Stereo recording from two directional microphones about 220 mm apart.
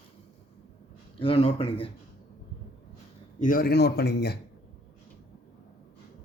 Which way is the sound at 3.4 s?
40° left (ahead or behind).